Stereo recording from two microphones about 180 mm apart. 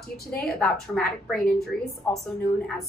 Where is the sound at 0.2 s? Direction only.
55° left (ahead or behind).